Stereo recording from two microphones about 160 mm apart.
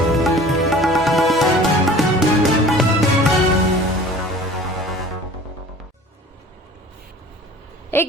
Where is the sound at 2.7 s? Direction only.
Centre (ahead or behind).